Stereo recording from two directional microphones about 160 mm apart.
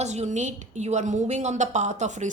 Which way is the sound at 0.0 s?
45° right (ahead or behind).